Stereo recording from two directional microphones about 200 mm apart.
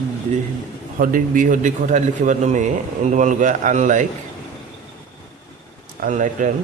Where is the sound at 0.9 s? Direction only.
45° right (ahead or behind).